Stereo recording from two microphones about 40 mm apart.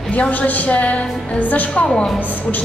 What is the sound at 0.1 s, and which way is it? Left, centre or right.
A woman's voice, left.